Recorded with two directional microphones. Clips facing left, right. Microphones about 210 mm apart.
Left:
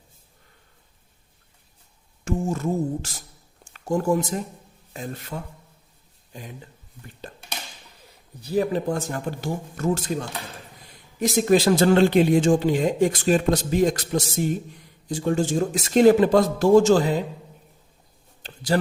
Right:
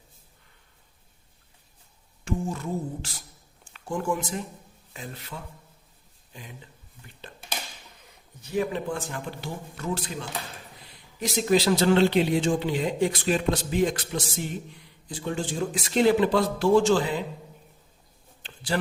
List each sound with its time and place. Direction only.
2.2 s speech: 45° left (ahead or behind)
8.4 s speech: 35° left (ahead or behind)
18.4 s a sound: 40° left (ahead or behind)